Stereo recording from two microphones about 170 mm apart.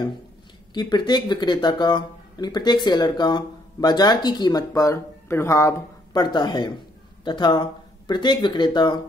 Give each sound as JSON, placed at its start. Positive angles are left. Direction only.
{"t": 0.7, "sound": "speech", "side_deg": 25}